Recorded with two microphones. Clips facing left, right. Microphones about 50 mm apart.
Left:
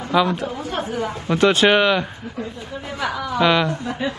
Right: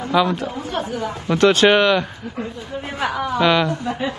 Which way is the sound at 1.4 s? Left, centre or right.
Centre.